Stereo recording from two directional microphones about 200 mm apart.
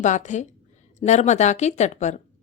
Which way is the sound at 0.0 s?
35° left (ahead or behind).